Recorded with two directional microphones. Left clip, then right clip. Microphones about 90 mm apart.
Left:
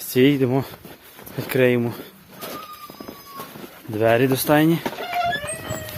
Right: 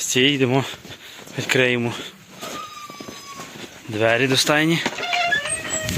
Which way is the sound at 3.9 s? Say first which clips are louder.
Even; 35° left (ahead or behind).